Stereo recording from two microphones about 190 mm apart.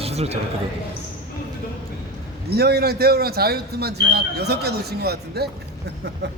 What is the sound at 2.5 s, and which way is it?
Speech, 55° right (ahead or behind).